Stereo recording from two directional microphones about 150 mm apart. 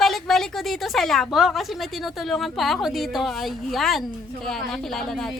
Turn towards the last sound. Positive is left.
turn(degrees=5)  # may be behind; listen again after turning